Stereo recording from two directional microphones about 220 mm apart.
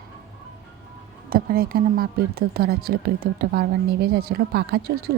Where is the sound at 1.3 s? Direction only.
40° right (ahead or behind).